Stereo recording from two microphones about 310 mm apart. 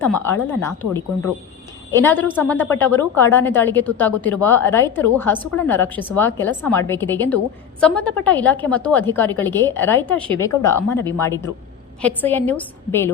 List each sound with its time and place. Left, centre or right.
0.3 s a woman's voice: centre
1.9 s a woman's voice: centre